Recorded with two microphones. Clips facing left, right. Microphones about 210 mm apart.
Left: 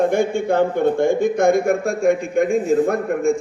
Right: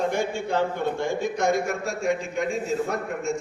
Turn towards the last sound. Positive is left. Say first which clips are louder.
# left 9 dB
turn(degrees=55)  # may be behind; listen again after turning